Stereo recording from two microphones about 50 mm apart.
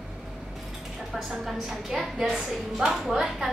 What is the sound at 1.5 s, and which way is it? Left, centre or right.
A woman's voice, centre.